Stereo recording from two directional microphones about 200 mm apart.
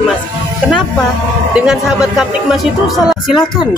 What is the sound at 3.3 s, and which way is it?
Speech, 20° left (ahead or behind).